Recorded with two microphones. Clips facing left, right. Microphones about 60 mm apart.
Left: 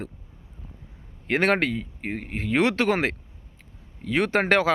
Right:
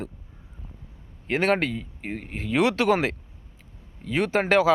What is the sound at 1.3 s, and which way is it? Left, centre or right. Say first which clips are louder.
Speech: left 1 dB; left.